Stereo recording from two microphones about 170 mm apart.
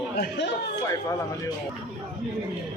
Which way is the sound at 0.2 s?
75° left (ahead or behind).